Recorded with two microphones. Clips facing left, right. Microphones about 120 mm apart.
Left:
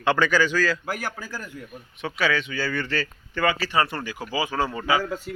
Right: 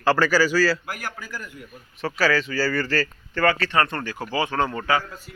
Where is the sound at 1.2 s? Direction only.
30° left (ahead or behind).